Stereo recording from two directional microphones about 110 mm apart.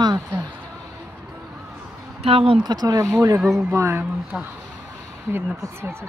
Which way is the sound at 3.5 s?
25° right (ahead or behind).